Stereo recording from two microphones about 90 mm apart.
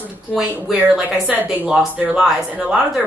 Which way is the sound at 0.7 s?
10° right (ahead or behind).